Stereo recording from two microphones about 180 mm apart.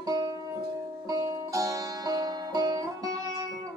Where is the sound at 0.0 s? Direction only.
20° right (ahead or behind).